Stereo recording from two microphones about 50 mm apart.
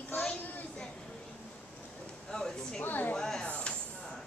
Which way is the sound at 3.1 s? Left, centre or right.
Centre.